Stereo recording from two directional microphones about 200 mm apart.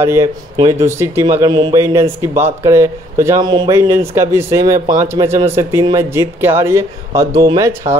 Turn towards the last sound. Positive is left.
turn(degrees=-15)  # may be behind; listen again after turning